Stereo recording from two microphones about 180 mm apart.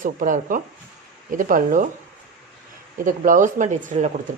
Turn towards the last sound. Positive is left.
turn(degrees=-40)  # may be behind; listen again after turning